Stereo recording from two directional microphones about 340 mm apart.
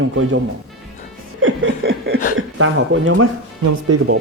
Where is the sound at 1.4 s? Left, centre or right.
Right.